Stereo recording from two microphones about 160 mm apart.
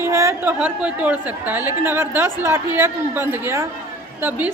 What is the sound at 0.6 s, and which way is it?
A woman's voice, 10° right (ahead or behind).